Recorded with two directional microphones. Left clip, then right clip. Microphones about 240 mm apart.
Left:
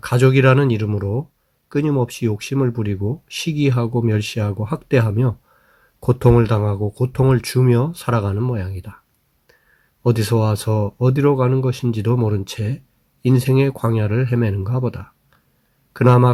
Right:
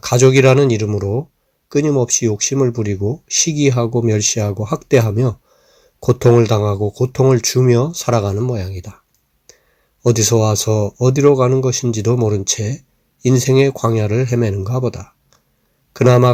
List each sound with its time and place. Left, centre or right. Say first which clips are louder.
0.0 s speech: right 4 dB; centre
10.0 s a man's voice: right 5 dB; centre